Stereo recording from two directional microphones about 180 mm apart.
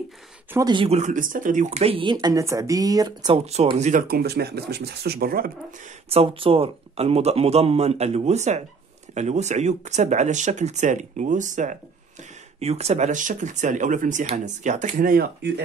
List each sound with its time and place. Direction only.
0.5 s speech: 20° right (ahead or behind)
0.9 s speech: 45° right (ahead or behind); by 3.3 s 20° right (ahead or behind)
3.3 s speech: 35° right (ahead or behind)
4.1 s speech: 60° right (ahead or behind)
6.0 s speech: 30° right (ahead or behind); by 15.6 s 60° right (ahead or behind)